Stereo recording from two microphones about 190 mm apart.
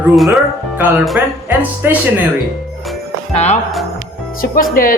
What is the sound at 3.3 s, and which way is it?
Speech, 35° left (ahead or behind).